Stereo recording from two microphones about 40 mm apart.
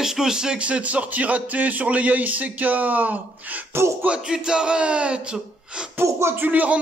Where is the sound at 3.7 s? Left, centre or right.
Right.